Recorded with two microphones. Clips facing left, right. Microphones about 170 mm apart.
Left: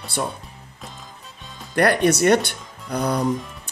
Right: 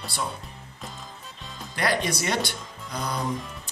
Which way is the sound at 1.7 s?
60° left (ahead or behind).